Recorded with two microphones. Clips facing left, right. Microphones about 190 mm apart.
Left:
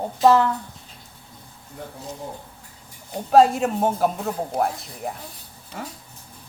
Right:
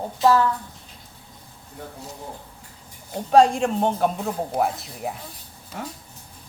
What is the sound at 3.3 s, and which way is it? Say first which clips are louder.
Speech: left 1 dB; 5° left (ahead or behind).